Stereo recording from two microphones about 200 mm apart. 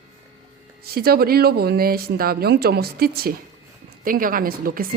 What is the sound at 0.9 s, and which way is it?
Speech, 50° right (ahead or behind).